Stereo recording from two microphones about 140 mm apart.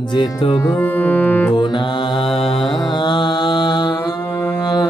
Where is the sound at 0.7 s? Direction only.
10° left (ahead or behind).